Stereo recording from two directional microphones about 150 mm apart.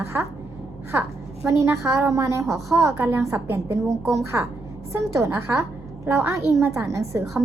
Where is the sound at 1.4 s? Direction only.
20° right (ahead or behind).